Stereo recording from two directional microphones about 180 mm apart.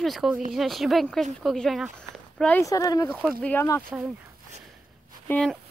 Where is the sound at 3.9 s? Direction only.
10° right (ahead or behind).